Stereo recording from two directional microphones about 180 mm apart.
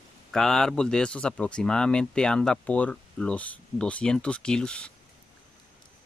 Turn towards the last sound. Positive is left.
turn(degrees=5)  # may be behind; listen again after turning